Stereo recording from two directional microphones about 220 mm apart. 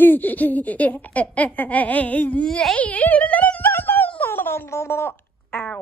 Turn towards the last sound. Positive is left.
turn(degrees=10)  # may be behind; listen again after turning